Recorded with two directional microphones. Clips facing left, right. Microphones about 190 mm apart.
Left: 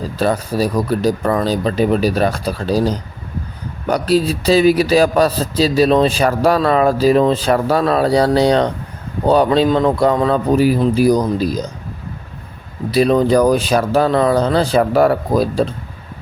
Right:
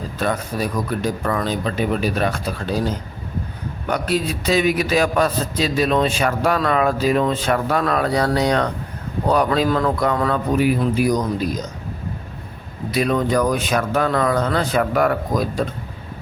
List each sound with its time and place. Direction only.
0.0 s a man's voice: 35° left (ahead or behind)
12.9 s a man's voice: 30° left (ahead or behind)